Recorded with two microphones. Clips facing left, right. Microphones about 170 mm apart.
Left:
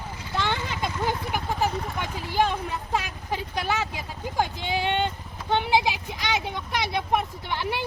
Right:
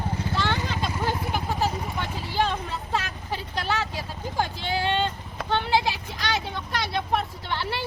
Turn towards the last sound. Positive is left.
turn(degrees=15)  # may be behind; listen again after turning